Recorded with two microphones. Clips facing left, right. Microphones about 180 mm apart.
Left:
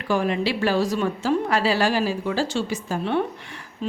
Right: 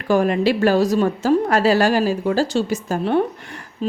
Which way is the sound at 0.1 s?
45° right (ahead or behind).